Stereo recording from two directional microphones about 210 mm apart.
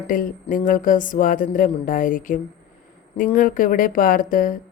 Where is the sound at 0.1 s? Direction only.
40° left (ahead or behind).